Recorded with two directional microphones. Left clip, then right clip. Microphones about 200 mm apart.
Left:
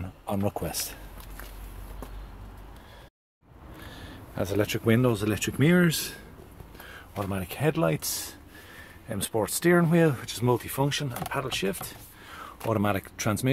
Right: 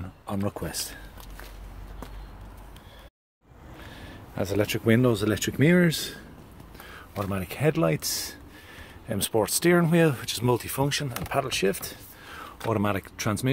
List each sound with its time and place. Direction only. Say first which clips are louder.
0.3 s speech: left 2 dB; 10° left (ahead or behind)
3.8 s speech: even; 5° right (ahead or behind)
6.9 s speech: right 1 dB; 10° right (ahead or behind)
12.4 s speech: right 1 dB; 5° right (ahead or behind)